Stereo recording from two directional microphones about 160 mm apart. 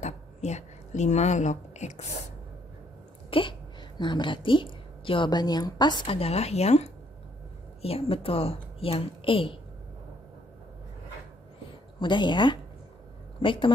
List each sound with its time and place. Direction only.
0.0 s a sound: 45° left (ahead or behind)
3.3 s a woman's voice: 30° left (ahead or behind)
12.0 s a woman's voice: 30° left (ahead or behind)